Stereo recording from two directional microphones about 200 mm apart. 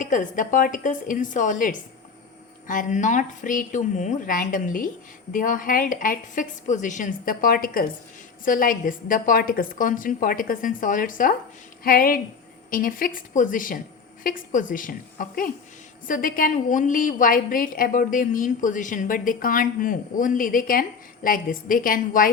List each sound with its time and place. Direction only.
0.0 s a woman's voice: 40° left (ahead or behind)